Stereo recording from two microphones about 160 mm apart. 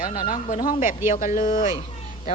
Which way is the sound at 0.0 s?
60° left (ahead or behind).